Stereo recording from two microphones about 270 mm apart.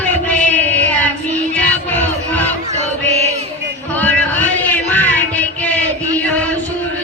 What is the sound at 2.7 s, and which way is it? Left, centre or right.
Chant, right.